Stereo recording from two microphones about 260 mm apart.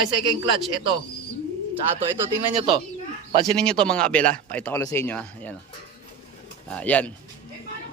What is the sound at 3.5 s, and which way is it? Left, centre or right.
A man's voice, centre.